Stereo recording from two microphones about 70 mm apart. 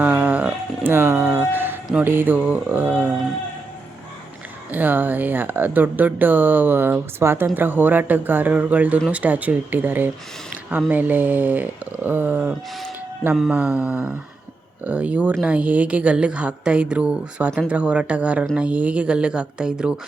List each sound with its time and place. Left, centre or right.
0.0 s a sound: right
0.9 s speech: right
4.7 s speech: right